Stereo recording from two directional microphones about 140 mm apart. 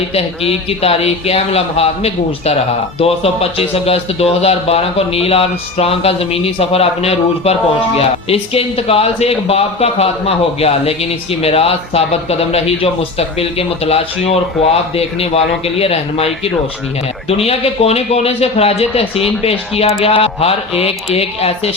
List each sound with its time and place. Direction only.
0.1 s speech: 45° left (ahead or behind)